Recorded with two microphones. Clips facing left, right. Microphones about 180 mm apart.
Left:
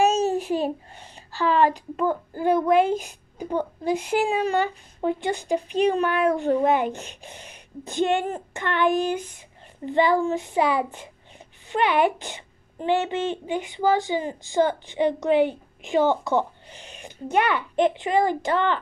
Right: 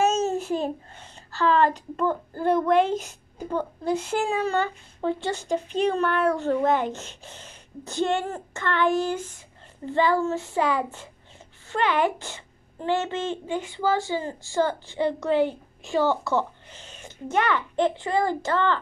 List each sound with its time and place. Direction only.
0.0 s a child's voice: 15° left (ahead or behind)